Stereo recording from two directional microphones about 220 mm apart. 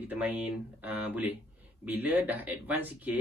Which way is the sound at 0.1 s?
5° right (ahead or behind).